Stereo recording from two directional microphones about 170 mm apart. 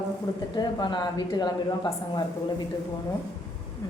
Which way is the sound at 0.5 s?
25° left (ahead or behind).